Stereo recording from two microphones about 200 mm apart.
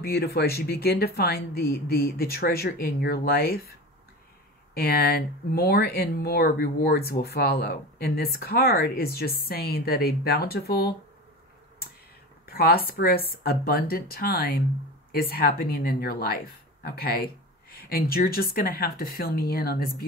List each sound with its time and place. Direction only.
0.0 s speech: 50° left (ahead or behind)
4.7 s speech: 50° left (ahead or behind)
12.4 s a woman's voice: 50° left (ahead or behind)